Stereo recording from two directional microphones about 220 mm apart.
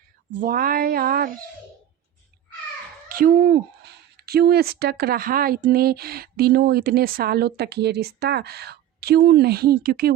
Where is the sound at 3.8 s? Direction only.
45° right (ahead or behind).